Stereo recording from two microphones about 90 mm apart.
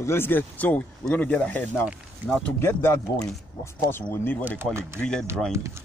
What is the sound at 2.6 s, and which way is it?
Speech, 30° left (ahead or behind).